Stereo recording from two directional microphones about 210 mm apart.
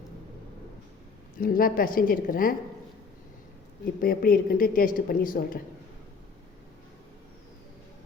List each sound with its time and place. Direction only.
1.4 s a woman's voice: 45° left (ahead or behind)
4.0 s a woman's voice: 45° left (ahead or behind)